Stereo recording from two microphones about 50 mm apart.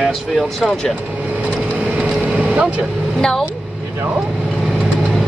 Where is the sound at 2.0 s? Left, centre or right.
Right.